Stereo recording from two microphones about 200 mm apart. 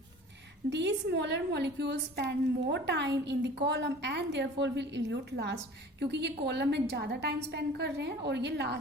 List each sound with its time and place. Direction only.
0.7 s a woman's voice: 60° right (ahead or behind)